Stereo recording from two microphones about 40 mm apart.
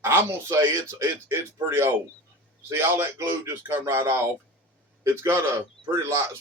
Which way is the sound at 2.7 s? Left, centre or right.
Right.